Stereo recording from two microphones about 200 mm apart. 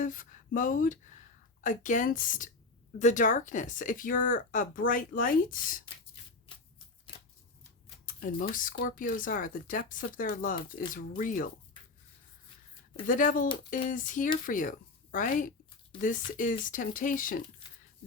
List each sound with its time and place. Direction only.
0.0 s speech: 40° left (ahead or behind)
8.0 s speech: 45° left (ahead or behind)
13.1 s speech: 40° left (ahead or behind)